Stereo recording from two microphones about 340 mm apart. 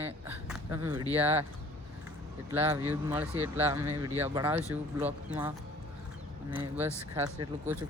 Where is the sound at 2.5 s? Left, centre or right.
Centre.